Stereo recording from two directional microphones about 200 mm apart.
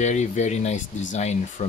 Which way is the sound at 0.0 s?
35° left (ahead or behind).